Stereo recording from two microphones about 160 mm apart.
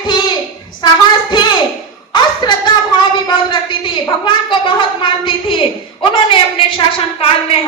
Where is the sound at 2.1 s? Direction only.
30° left (ahead or behind).